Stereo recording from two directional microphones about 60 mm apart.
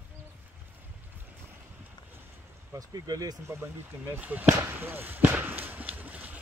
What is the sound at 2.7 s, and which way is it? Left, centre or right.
Speech, right.